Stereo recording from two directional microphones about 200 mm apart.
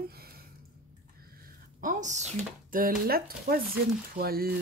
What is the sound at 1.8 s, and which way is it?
Speech, 35° right (ahead or behind).